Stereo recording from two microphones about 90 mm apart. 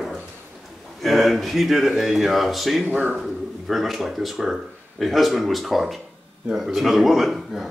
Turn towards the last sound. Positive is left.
turn(degrees=0)  # may be behind; listen again after turning